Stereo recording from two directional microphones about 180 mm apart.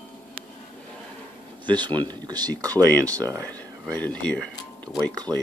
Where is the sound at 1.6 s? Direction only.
25° right (ahead or behind).